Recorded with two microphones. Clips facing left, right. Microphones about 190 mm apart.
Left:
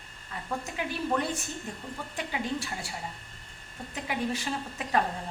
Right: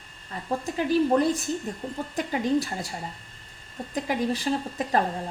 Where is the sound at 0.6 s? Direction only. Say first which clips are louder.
Right 15 dB; 35° right (ahead or behind).